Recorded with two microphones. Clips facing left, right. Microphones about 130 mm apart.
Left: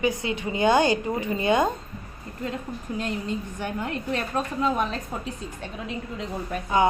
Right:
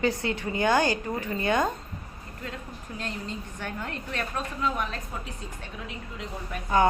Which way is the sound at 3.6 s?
15° left (ahead or behind).